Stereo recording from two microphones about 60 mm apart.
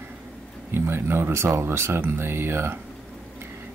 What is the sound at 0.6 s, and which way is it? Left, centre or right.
Speech, right.